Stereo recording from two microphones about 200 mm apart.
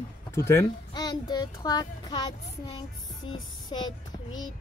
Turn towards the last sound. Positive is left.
turn(degrees=25)  # may be behind; listen again after turning